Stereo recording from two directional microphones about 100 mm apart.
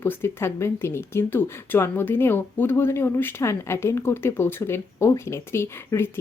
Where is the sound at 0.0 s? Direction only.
25° left (ahead or behind).